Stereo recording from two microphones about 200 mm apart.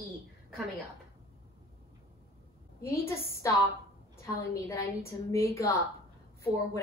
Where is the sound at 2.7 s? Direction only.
15° left (ahead or behind).